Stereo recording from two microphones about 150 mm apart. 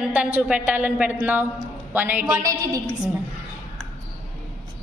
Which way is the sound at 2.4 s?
20° right (ahead or behind).